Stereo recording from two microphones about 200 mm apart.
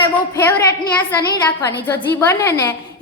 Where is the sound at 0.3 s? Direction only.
10° left (ahead or behind).